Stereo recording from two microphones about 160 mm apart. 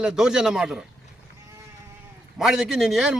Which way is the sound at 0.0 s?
5° right (ahead or behind).